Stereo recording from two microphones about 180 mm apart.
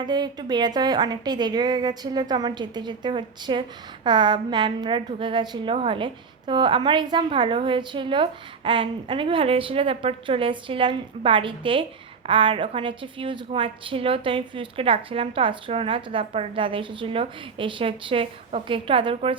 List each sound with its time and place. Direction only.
0.0 s a woman's voice: 25° right (ahead or behind)